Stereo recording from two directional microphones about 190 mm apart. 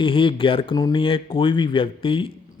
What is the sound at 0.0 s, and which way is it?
Speech, 25° left (ahead or behind).